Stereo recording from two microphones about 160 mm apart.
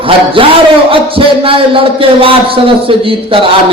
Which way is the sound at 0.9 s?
35° right (ahead or behind).